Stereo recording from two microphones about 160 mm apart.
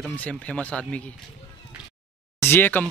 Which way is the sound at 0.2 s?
10° left (ahead or behind).